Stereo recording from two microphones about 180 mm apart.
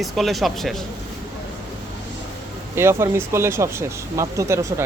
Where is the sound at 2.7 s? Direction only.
15° right (ahead or behind).